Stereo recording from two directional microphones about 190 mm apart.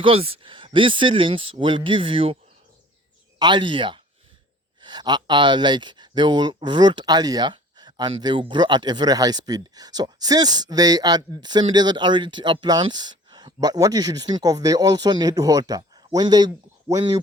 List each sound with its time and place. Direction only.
0.0 s speech: 30° right (ahead or behind)